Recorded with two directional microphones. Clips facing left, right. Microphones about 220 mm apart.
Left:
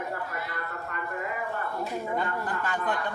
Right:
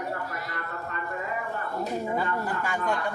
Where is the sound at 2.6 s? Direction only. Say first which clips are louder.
Even; 10° right (ahead or behind).